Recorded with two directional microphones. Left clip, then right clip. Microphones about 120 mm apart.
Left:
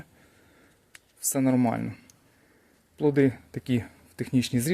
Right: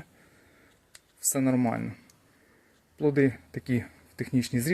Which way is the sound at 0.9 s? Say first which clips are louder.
Left 1 dB; 15° left (ahead or behind).